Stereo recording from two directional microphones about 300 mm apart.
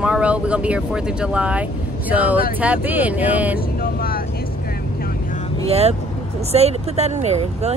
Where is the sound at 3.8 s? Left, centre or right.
Left.